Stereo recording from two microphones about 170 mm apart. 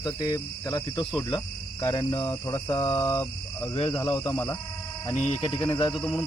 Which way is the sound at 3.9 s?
15° left (ahead or behind).